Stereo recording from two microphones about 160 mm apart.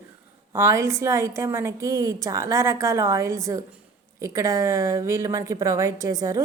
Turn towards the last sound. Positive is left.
turn(degrees=-20)  # may be behind; listen again after turning